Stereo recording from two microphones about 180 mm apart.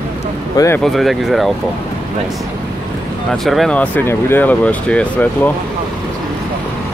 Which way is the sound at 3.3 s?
Centre (ahead or behind).